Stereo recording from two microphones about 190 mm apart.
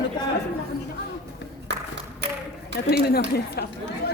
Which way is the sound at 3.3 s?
55° left (ahead or behind).